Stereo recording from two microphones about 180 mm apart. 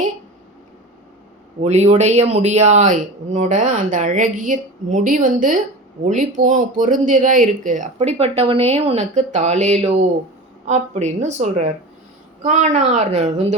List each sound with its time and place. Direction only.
1.6 s a woman's voice: 40° right (ahead or behind)